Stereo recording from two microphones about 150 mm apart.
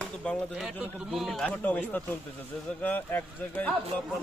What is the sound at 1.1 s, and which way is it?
Speech, centre (ahead or behind).